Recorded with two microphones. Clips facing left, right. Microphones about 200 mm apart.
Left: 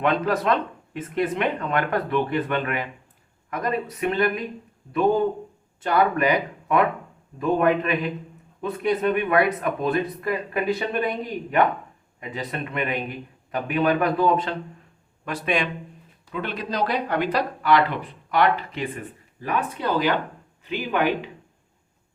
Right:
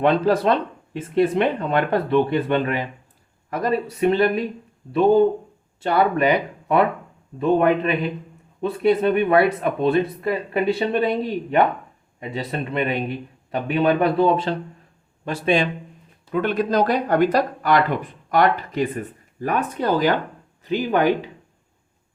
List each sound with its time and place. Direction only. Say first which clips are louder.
0.0 s speech: right 5 dB; 35° right (ahead or behind)
16.3 s speech: right 9 dB; 50° right (ahead or behind)